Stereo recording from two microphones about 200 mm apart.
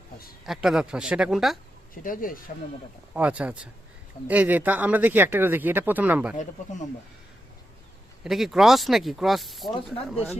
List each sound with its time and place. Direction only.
0.4 s speech: centre (ahead or behind)
2.0 s speech: 45° left (ahead or behind)
3.2 s speech: 5° right (ahead or behind)
6.3 s speech: 35° left (ahead or behind)
8.2 s speech: centre (ahead or behind)
9.6 s speech: 25° left (ahead or behind)